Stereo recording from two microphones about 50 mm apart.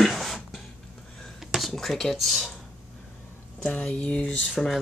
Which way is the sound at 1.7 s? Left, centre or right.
Centre.